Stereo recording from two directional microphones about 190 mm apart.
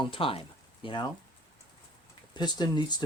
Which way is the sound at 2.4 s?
25° left (ahead or behind).